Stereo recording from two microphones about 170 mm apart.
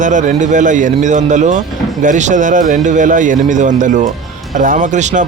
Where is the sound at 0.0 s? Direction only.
45° right (ahead or behind).